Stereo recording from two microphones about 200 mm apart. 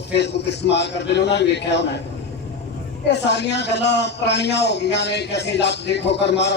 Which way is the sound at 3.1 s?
60° left (ahead or behind).